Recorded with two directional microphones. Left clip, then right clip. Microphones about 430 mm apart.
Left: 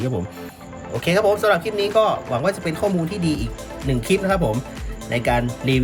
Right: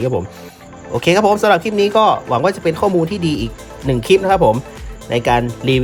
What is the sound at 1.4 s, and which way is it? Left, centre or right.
Speech, centre.